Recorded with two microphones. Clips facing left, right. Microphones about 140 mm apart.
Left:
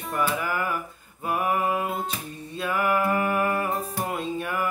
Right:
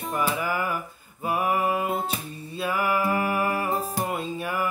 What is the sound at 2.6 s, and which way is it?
Music, 5° right (ahead or behind).